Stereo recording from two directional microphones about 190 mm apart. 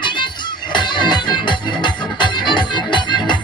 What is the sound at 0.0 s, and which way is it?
Music, 25° left (ahead or behind).